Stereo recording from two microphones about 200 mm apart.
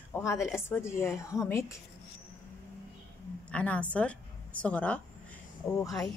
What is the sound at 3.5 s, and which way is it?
A woman's voice, 5° left (ahead or behind).